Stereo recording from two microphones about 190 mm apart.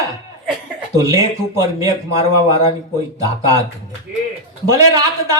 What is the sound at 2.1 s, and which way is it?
Speech, 30° left (ahead or behind).